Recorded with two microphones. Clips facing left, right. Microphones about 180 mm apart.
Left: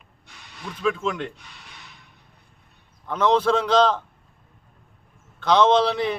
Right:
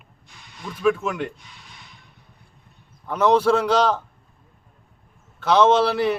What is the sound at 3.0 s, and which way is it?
Speech, 10° right (ahead or behind).